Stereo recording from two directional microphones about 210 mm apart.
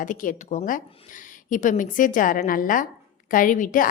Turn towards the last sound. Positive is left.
turn(degrees=40)  # may be behind; listen again after turning